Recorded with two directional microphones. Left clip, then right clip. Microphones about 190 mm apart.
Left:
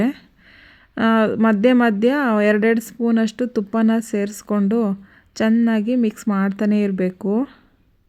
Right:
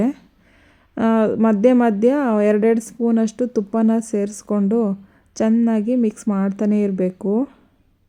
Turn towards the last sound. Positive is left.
turn(degrees=15)  # may be behind; listen again after turning